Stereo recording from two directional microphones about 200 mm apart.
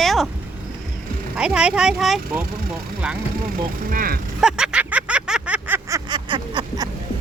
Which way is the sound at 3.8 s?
45° right (ahead or behind).